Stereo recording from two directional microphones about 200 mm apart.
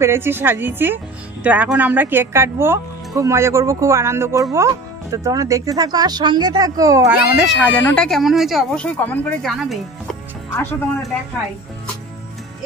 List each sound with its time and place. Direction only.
0.0 s speech: 10° right (ahead or behind)
7.3 s speech: 5° left (ahead or behind)